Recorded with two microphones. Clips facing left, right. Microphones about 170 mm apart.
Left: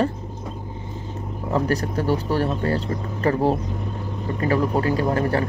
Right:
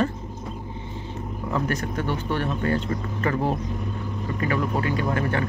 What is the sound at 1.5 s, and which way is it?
Speech, 35° left (ahead or behind).